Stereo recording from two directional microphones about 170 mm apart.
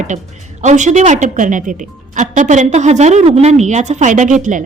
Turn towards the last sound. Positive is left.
turn(degrees=-50)  # may be behind; listen again after turning